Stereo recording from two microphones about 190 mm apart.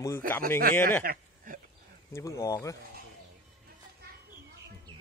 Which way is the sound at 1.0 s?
45° right (ahead or behind).